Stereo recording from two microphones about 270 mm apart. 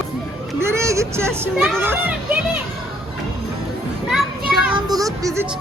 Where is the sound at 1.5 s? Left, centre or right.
Centre.